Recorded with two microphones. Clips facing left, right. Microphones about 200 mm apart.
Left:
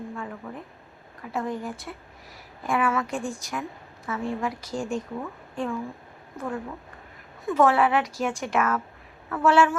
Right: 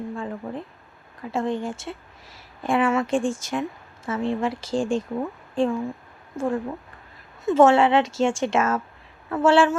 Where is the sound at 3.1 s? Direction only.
90° right.